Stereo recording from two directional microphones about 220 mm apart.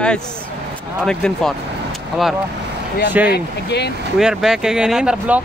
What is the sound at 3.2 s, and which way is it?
Speech, 50° left (ahead or behind).